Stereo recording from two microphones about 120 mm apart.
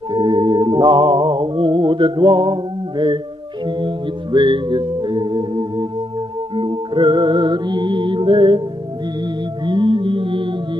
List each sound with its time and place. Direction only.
0.1 s music: 40° right (ahead or behind)